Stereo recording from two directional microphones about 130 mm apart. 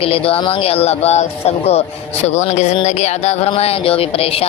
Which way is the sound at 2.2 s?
60° left (ahead or behind).